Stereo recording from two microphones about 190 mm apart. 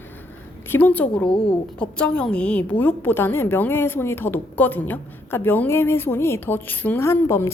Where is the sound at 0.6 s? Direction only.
10° left (ahead or behind).